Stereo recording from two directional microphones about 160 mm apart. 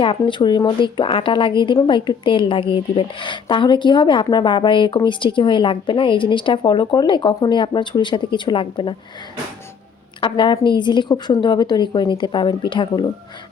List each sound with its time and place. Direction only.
0.0 s speech: 30° left (ahead or behind)
10.2 s a woman's voice: 30° left (ahead or behind)